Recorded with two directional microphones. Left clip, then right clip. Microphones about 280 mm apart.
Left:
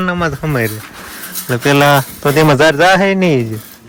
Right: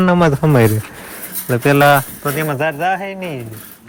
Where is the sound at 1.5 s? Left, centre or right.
Centre.